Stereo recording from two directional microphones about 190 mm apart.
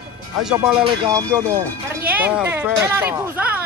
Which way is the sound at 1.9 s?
10° right (ahead or behind).